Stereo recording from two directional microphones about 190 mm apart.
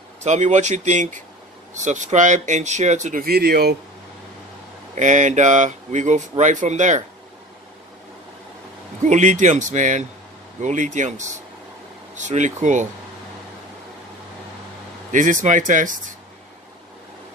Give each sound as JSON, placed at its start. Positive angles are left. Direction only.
{"t": 0.2, "sound": "speech", "side_deg": -35}
{"t": 4.9, "sound": "speech", "side_deg": -40}
{"t": 9.0, "sound": "speech", "side_deg": -40}
{"t": 15.0, "sound": "speech", "side_deg": -40}